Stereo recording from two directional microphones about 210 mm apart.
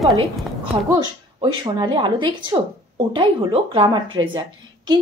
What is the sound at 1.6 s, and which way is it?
A woman's voice, 20° right (ahead or behind).